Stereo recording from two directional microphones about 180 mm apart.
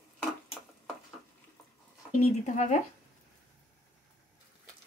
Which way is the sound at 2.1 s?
40° left (ahead or behind).